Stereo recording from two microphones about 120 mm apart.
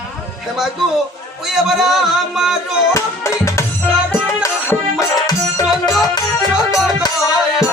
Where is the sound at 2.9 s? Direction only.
25° left (ahead or behind).